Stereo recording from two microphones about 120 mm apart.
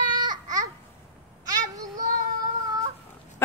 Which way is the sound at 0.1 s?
35° right (ahead or behind).